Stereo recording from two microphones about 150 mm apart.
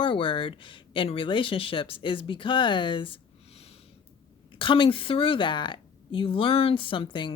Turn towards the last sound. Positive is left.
turn(degrees=35)  # may be behind; listen again after turning